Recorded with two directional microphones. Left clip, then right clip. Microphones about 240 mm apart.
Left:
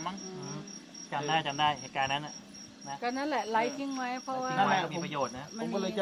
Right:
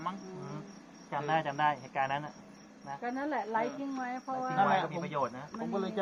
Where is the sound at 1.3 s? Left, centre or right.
Centre.